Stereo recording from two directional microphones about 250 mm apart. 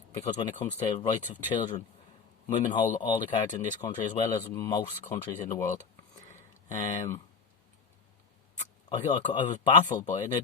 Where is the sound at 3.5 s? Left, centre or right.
Left.